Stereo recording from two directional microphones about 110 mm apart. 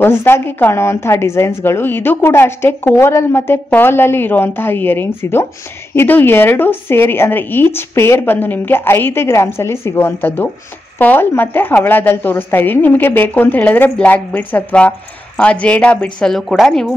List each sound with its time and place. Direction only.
0.0 s a woman's voice: 20° left (ahead or behind); by 16.9 s centre (ahead or behind)